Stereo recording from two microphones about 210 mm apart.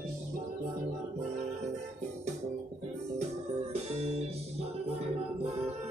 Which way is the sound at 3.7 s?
30° right (ahead or behind).